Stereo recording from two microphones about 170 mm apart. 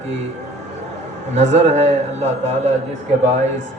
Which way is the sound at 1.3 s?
45° right (ahead or behind).